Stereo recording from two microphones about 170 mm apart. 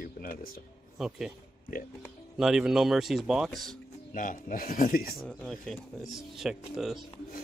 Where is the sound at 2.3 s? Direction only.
5° right (ahead or behind).